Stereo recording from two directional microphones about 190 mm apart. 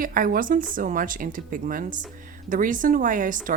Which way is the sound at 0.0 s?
50° right (ahead or behind).